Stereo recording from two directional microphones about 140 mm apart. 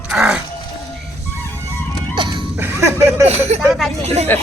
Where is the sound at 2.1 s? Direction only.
35° right (ahead or behind).